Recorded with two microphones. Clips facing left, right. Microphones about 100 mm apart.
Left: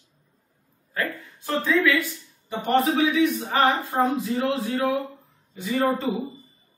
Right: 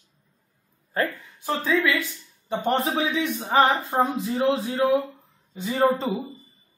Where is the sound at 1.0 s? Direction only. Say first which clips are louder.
Right 3 dB; 35° right (ahead or behind).